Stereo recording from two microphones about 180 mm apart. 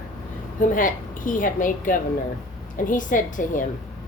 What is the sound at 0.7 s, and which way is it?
Speech, 50° left (ahead or behind).